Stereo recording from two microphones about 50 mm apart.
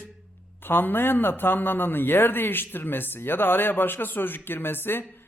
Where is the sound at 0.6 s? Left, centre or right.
Left.